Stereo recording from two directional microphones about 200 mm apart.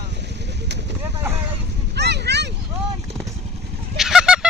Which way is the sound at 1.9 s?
55° right (ahead or behind).